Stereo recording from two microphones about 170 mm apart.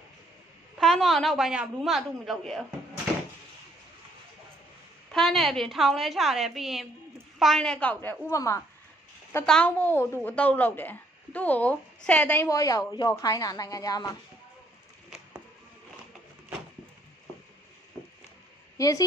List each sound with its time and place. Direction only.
0.7 s a woman's voice: 5° left (ahead or behind)
5.1 s a woman's voice: centre (ahead or behind); by 8.6 s 20° left (ahead or behind)
9.5 s a woman's voice: 5° left (ahead or behind)
18.8 s a woman's voice: 20° left (ahead or behind)